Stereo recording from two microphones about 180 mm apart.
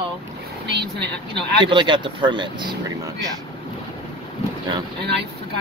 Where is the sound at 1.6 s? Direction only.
25° right (ahead or behind).